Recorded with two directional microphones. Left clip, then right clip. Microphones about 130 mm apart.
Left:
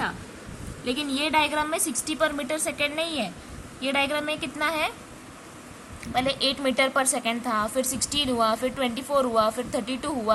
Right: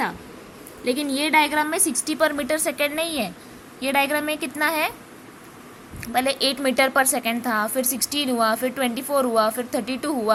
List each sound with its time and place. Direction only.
0.9 s a woman's voice: 25° right (ahead or behind)
6.1 s a woman's voice: 30° right (ahead or behind)